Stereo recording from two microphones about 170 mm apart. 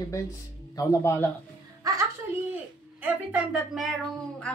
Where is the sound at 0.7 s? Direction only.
20° left (ahead or behind).